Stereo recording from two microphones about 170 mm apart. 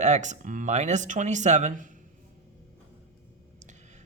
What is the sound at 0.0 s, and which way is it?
Speech, 45° right (ahead or behind).